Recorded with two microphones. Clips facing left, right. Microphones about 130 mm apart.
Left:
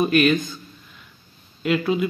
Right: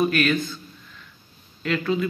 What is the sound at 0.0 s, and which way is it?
Speech, 20° left (ahead or behind).